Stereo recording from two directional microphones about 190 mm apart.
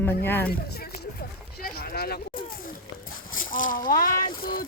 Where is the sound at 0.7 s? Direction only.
55° left (ahead or behind).